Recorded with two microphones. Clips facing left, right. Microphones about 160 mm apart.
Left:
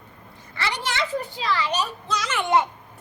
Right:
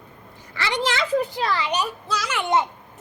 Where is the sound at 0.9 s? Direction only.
90° right.